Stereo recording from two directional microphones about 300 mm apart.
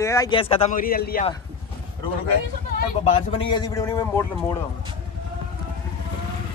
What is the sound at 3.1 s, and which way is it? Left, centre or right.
Speech, centre.